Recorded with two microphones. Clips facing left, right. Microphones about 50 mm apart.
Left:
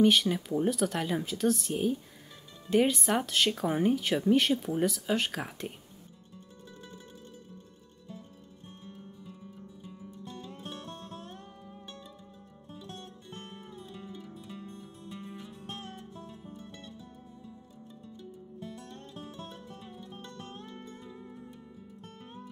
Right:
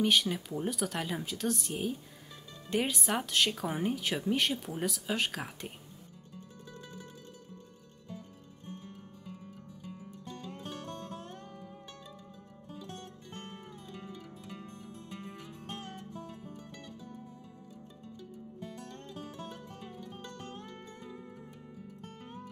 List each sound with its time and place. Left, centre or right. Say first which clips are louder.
0.0 s speech: left 4 dB; centre
10.1 s music: left 1 dB; right
14.0 s music: left 1 dB; right
20.6 s music: left 1 dB; right